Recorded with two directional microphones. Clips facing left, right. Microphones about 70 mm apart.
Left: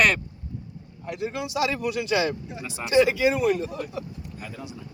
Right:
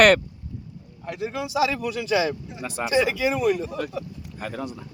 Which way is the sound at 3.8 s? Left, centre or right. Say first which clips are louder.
Right 4 dB; right.